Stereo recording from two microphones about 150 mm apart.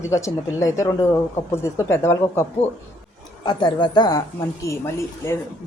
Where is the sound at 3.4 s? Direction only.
30° left (ahead or behind).